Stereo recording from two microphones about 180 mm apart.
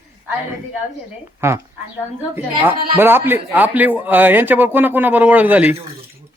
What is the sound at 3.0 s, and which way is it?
Speech, 10° right (ahead or behind).